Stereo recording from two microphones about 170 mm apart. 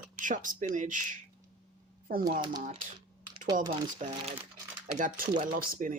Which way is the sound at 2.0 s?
60° right (ahead or behind).